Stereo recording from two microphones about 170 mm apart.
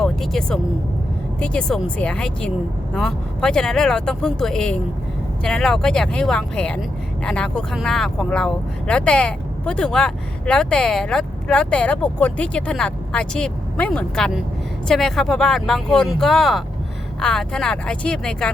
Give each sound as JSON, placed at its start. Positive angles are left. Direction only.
{"t": 0.0, "sound": "speech", "side_deg": 0}